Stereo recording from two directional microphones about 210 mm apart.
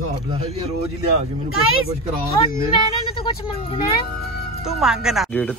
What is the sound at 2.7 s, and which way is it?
Speech, 25° left (ahead or behind).